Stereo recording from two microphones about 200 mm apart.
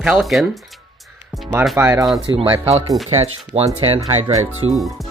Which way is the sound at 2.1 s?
25° right (ahead or behind).